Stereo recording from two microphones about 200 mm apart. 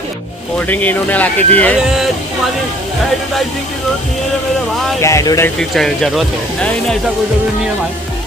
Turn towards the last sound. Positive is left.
turn(degrees=5)  # may be behind; listen again after turning